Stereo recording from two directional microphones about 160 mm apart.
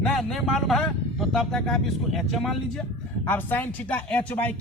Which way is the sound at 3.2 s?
10° left (ahead or behind).